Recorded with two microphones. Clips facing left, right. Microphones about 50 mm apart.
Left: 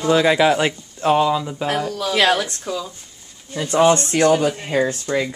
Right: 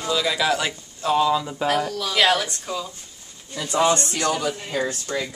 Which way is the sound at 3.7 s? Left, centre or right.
Left.